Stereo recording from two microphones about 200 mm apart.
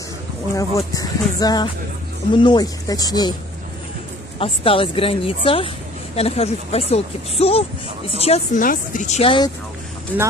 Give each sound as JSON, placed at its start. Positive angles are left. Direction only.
{"t": 0.6, "sound": "speech", "side_deg": 15}
{"t": 4.4, "sound": "speech", "side_deg": 25}